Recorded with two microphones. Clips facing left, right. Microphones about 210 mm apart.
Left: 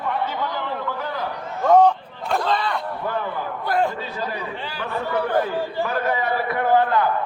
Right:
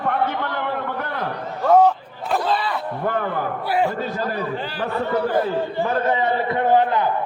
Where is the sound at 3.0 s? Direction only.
55° right (ahead or behind).